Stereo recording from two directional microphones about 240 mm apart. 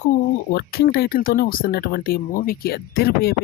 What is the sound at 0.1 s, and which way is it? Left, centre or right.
Speech, left.